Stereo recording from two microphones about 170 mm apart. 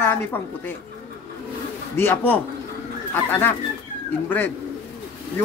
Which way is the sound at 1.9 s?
10° left (ahead or behind).